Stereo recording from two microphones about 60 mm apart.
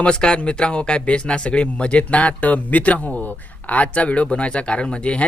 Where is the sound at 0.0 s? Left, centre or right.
Centre.